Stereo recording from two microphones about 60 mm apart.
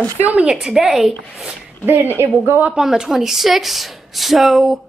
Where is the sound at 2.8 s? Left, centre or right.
Centre.